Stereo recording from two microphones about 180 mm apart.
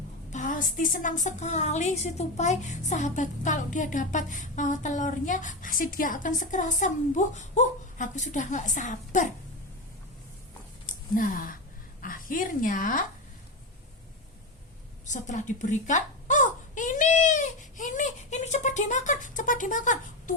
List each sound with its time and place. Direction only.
0.3 s a woman's voice: 45° left (ahead or behind)
10.8 s a woman's voice: 50° left (ahead or behind)
15.0 s crying: 40° left (ahead or behind)